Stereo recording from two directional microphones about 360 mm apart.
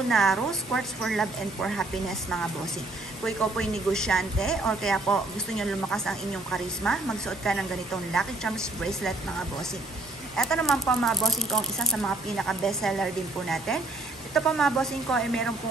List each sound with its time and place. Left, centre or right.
0.1 s a woman's voice: centre
3.3 s a woman's voice: centre
10.3 s a woman's voice: centre